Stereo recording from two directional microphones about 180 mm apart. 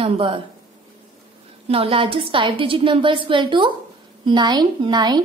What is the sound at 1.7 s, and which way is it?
A woman's voice, 30° right (ahead or behind).